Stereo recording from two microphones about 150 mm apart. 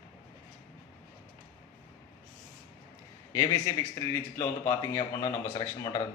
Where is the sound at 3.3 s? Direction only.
20° left (ahead or behind).